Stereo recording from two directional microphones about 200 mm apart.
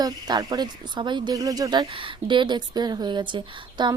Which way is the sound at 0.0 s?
20° right (ahead or behind).